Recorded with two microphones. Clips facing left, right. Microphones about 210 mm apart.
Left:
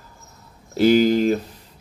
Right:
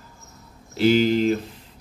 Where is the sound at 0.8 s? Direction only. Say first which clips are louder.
Left 3 dB; 45° left (ahead or behind).